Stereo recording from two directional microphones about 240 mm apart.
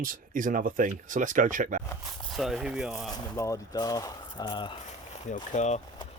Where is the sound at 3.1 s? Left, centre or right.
Centre.